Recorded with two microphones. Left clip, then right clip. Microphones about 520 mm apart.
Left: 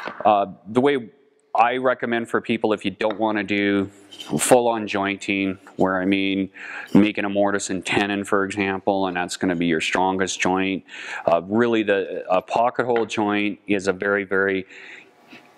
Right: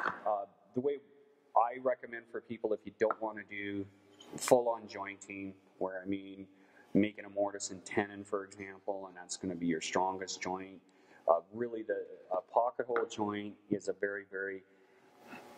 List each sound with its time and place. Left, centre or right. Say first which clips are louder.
0.3 s speech: left 17 dB; left
1.6 s speech: left 13 dB; left
3.3 s speech: left 19 dB; left